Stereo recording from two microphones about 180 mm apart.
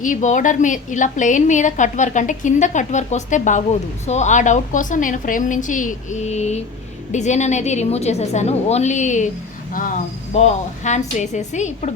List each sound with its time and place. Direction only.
0.0 s a woman's voice: 45° left (ahead or behind)
10.3 s a woman's voice: 40° left (ahead or behind)